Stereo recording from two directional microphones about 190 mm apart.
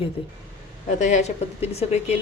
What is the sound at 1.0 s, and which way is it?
A woman's voice, 40° left (ahead or behind).